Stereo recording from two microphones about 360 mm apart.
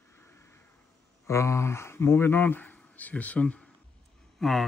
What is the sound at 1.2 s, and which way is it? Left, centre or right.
Speech, centre.